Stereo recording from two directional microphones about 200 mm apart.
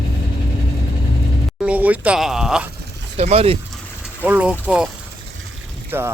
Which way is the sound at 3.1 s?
30° right (ahead or behind).